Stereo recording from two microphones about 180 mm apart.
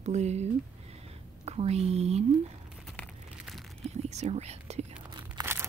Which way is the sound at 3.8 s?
35° right (ahead or behind).